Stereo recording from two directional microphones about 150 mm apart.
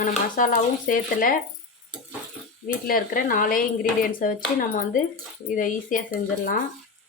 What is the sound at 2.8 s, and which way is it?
Speech, 70° left (ahead or behind).